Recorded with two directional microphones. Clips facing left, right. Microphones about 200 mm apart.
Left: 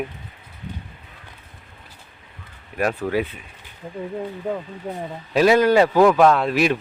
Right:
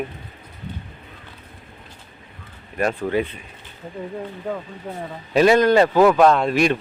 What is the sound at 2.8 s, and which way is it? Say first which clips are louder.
Speech: right 1 dB; 5° left (ahead or behind).